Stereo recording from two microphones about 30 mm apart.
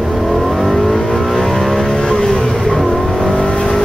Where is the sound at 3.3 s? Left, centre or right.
Left.